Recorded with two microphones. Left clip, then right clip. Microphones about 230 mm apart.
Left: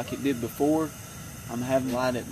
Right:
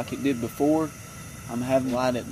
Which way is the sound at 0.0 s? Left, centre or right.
Centre.